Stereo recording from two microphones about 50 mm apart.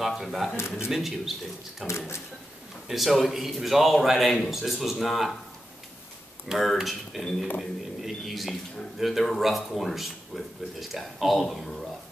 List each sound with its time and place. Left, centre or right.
0.0 s speech: centre
0.6 s speech: left
0.8 s speech: centre
1.9 s speech: left
2.9 s speech: centre
6.5 s speech: centre